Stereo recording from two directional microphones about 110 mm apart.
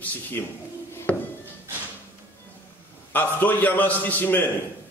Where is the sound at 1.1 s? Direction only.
10° left (ahead or behind).